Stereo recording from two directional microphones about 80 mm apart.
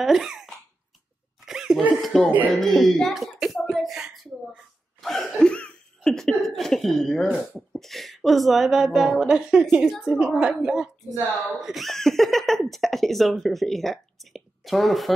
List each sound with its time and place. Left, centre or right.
0.0 s speech: centre
1.4 s a sound: centre
2.6 s speech: centre
7.2 s a woman's voice: centre
7.7 s a woman's voice: centre